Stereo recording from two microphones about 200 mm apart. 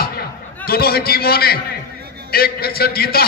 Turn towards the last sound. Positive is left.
turn(degrees=50)  # may be behind; listen again after turning